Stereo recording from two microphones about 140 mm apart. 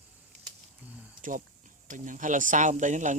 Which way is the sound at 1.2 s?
70° right (ahead or behind).